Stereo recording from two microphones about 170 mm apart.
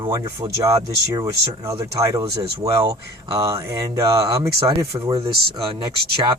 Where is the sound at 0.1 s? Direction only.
20° right (ahead or behind).